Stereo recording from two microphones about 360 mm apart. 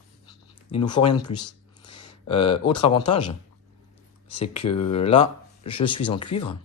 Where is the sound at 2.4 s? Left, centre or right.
Centre.